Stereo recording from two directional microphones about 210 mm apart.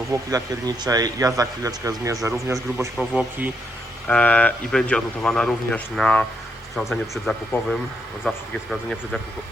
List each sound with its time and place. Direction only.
0.1 s a man's voice: 15° right (ahead or behind)
4.0 s speech: 5° left (ahead or behind)
7.3 s speech: centre (ahead or behind)